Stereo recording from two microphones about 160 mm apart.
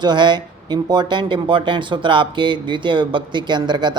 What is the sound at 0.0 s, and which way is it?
Speech, 30° right (ahead or behind).